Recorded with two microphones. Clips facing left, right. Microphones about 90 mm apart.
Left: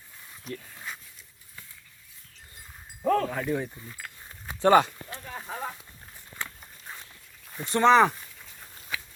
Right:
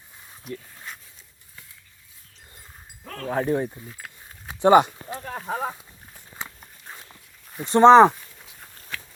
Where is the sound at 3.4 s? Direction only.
20° right (ahead or behind).